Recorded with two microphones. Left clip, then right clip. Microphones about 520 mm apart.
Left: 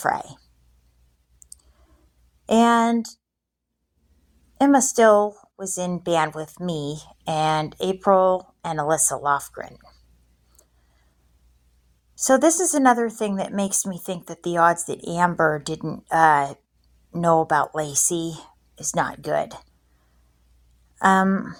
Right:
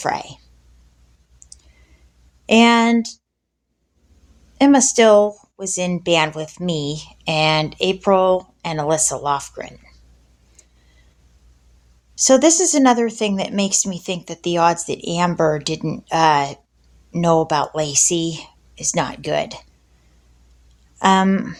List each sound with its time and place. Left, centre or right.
2.5 s speech: left
4.5 s speech: left
12.1 s speech: left
21.0 s speech: left